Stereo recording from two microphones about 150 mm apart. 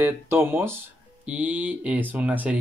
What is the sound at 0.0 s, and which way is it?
Speech, 15° right (ahead or behind).